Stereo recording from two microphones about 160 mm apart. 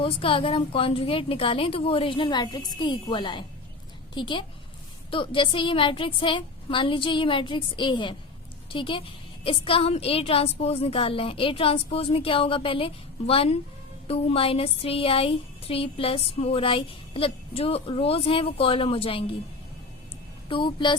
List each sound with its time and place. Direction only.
0.0 s speech: 35° left (ahead or behind)
20.5 s speech: 30° left (ahead or behind)